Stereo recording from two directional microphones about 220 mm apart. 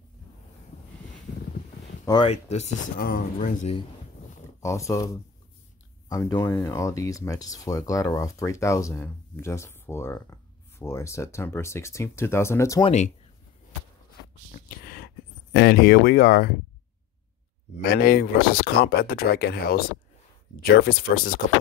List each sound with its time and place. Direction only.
2.0 s speech: 25° left (ahead or behind)
4.6 s speech: 15° left (ahead or behind)
12.8 s speech: 30° left (ahead or behind)
14.5 s a sound: 45° left (ahead or behind)
15.5 s speech: 45° left (ahead or behind)
17.8 s speech: 45° left (ahead or behind)